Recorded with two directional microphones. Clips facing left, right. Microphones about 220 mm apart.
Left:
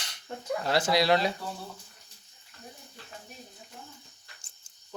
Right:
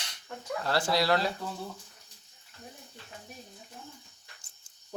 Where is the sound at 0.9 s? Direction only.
15° left (ahead or behind).